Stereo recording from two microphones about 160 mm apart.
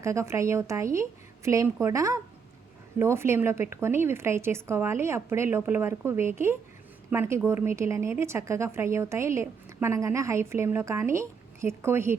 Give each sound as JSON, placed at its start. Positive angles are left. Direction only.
{"t": 0.0, "sound": "a woman's voice", "side_deg": -20}